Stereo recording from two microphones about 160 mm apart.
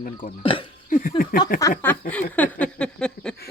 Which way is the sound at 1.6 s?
20° left (ahead or behind).